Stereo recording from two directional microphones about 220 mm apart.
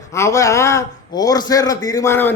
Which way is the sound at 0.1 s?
15° left (ahead or behind).